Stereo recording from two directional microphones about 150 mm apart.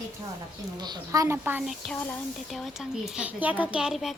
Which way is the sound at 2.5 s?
Centre (ahead or behind).